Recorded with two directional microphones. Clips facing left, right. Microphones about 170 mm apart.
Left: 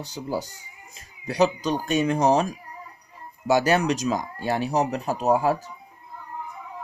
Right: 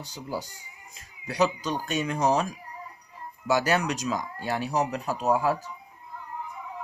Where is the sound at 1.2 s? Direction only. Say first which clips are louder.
Left 4 dB; 25° left (ahead or behind).